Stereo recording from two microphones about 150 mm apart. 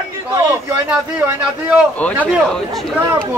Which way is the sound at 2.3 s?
5° left (ahead or behind).